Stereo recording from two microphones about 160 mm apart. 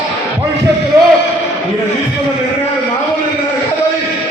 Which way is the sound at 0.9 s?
20° right (ahead or behind).